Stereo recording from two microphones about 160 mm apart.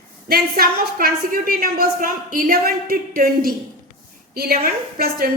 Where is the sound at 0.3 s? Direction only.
70° right (ahead or behind).